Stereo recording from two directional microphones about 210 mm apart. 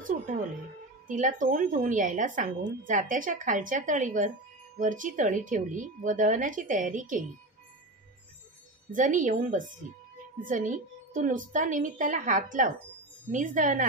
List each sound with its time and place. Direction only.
0.1 s music: 40° right (ahead or behind)
1.0 s a woman's voice: 40° right (ahead or behind)
8.9 s a woman's voice: 40° right (ahead or behind)